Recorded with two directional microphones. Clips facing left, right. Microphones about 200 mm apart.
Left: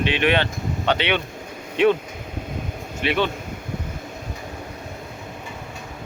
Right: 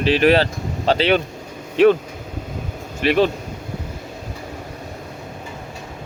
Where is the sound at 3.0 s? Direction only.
40° right (ahead or behind).